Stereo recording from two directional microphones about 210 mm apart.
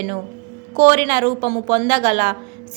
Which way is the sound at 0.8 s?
25° right (ahead or behind).